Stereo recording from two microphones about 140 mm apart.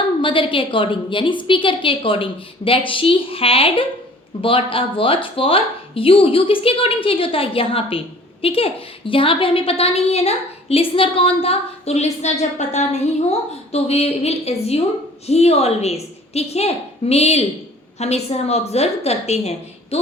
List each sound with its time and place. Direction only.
0.2 s a woman's voice: 40° left (ahead or behind)